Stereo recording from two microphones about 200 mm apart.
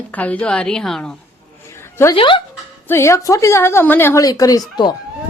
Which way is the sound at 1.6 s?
15° left (ahead or behind).